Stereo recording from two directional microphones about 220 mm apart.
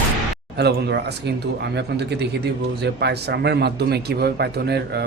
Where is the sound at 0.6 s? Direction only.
50° right (ahead or behind).